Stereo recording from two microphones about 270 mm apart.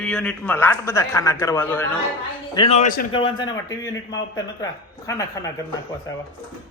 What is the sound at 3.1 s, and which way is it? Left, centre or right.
A man's voice, centre.